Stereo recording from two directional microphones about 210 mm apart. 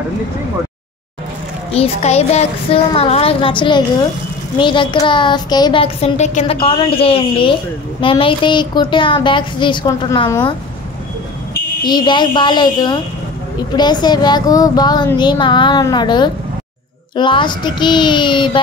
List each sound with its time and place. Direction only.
1.7 s speech: 30° left (ahead or behind)
11.8 s speech: 20° left (ahead or behind)